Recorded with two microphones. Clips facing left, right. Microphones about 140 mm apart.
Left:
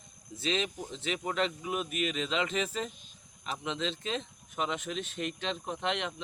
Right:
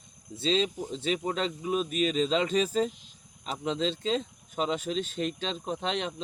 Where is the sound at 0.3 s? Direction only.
25° right (ahead or behind).